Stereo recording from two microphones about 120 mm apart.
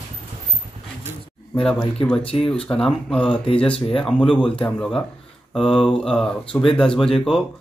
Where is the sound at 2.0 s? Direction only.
45° left (ahead or behind).